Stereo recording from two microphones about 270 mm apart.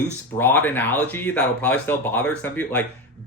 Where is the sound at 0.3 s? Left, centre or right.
Centre.